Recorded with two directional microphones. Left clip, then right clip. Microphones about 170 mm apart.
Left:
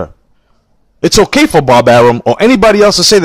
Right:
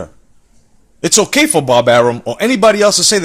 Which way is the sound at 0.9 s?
35° left (ahead or behind).